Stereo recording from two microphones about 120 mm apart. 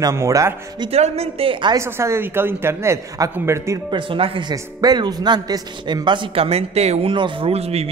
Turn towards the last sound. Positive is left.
turn(degrees=-60)  # may be behind; listen again after turning